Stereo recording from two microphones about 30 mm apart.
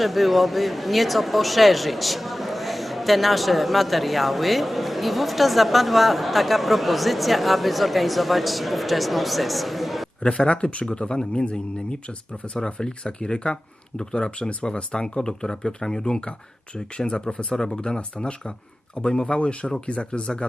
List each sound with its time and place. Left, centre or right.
0.0 s speech: centre
10.2 s speech: left
12.5 s speech: left